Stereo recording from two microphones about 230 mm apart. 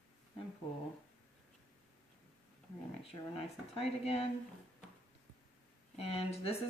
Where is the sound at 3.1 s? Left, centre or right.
Left.